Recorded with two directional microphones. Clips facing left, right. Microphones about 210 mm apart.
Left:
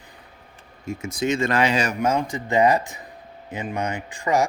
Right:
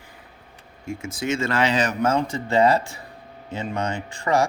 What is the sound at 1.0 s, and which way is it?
Speech, 20° left (ahead or behind).